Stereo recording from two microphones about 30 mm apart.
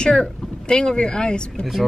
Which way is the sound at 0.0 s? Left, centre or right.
Left.